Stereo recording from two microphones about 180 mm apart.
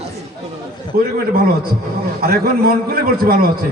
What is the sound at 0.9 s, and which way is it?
Speech, 55° right (ahead or behind).